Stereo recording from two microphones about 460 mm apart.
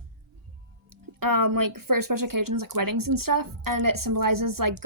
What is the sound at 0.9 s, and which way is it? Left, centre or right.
Speech, right.